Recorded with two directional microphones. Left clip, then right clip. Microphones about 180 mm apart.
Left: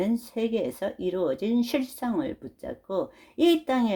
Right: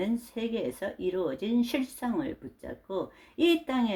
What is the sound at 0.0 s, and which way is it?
Speech, 35° left (ahead or behind).